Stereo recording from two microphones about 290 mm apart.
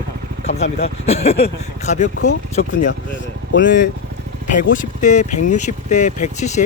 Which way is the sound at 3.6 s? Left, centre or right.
Left.